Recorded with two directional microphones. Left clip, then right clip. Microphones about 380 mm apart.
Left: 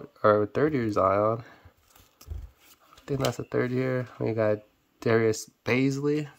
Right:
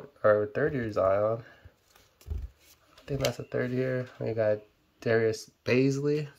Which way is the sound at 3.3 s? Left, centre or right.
Centre.